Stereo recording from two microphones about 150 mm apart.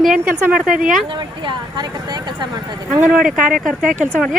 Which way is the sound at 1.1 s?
30° right (ahead or behind).